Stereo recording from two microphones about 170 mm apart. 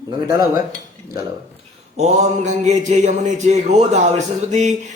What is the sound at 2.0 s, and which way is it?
Speech, 40° right (ahead or behind).